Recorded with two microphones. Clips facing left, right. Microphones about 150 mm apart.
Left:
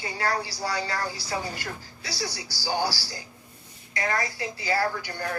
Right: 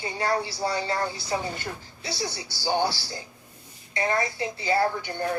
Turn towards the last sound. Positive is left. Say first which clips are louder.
# right 3 dB
turn(degrees=-25)  # may be behind; listen again after turning